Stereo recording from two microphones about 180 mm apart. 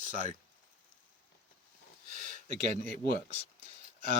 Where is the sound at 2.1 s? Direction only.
50° right (ahead or behind).